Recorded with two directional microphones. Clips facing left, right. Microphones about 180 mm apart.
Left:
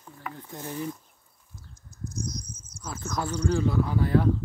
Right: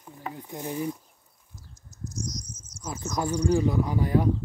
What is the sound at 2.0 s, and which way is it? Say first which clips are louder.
Cricket: left 1 dB; 55° left (ahead or behind).